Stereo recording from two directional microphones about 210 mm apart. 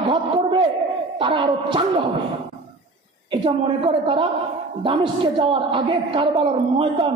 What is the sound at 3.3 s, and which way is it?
A woman's voice, 25° right (ahead or behind).